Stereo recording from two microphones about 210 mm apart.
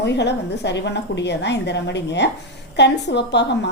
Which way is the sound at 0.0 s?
55° left (ahead or behind).